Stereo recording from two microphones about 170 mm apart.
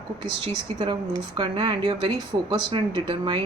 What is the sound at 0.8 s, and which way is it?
A woman's voice, 25° right (ahead or behind).